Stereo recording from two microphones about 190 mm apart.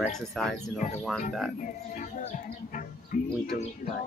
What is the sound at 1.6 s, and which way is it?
Speech, 45° left (ahead or behind).